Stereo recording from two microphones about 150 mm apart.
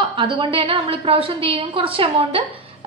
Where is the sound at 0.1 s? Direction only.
35° right (ahead or behind).